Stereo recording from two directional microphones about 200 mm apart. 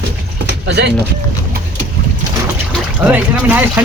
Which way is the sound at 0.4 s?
55° right (ahead or behind).